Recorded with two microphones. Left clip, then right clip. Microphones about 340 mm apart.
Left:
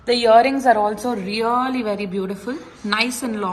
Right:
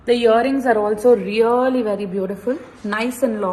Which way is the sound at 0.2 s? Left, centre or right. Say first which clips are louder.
Left 2 dB; left.